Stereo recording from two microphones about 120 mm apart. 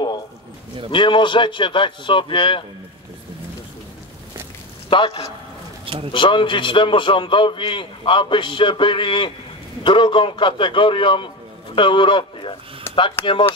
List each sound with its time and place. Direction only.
0.9 s a man's voice: 45° left (ahead or behind)
4.8 s a man's voice: 45° left (ahead or behind)
12.9 s a sound: 20° left (ahead or behind)
13.2 s a man's voice: 45° left (ahead or behind)